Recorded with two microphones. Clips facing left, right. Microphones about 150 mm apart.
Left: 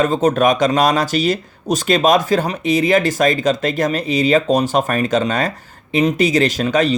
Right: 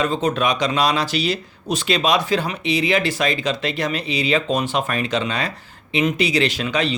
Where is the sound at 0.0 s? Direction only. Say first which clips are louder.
Left 6 dB; 45° left (ahead or behind).